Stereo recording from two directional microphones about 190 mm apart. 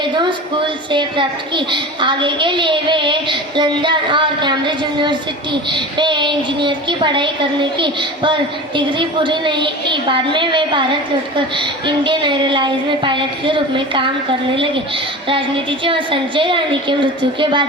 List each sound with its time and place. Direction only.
0.0 s a woman's voice: 25° right (ahead or behind)
15.3 s a woman's voice: 25° right (ahead or behind)